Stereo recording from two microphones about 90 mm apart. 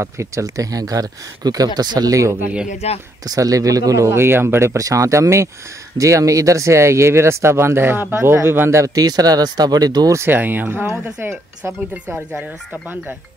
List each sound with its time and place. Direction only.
0.0 s speech: 35° right (ahead or behind)
10.1 s speech: 25° right (ahead or behind)